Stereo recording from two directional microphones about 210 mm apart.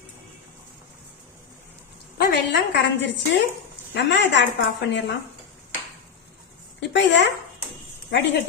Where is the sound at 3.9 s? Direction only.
55° left (ahead or behind).